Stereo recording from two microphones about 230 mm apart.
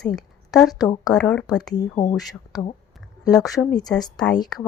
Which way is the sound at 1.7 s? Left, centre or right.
Centre.